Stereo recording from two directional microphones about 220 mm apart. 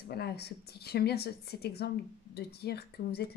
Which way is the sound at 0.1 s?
45° left (ahead or behind).